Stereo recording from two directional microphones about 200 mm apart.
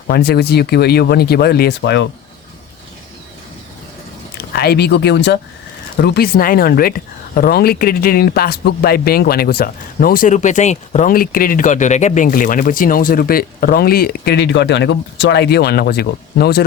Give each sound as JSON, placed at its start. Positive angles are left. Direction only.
{"t": 0.1, "sound": "speech", "side_deg": 50}
{"t": 4.5, "sound": "speech", "side_deg": 50}